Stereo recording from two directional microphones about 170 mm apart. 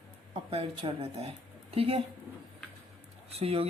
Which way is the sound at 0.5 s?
35° right (ahead or behind).